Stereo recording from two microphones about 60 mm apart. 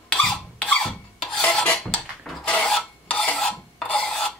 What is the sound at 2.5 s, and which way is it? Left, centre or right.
Filing, centre.